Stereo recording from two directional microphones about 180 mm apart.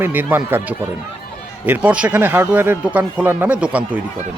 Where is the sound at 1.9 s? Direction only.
10° right (ahead or behind).